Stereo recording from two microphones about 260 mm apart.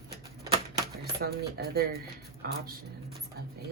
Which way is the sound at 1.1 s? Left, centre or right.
Right.